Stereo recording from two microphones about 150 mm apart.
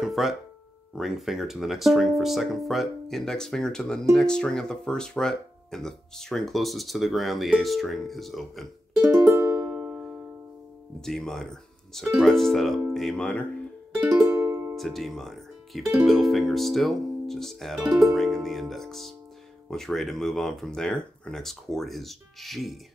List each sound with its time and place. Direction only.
0.0 s speech: centre (ahead or behind)
9.0 s music: 10° right (ahead or behind)
11.0 s speech: 5° left (ahead or behind)
14.1 s music: 15° right (ahead or behind)
14.8 s speech: centre (ahead or behind)